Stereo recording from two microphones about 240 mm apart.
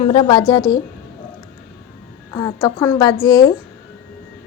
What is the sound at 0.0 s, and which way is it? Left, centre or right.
Speech, left.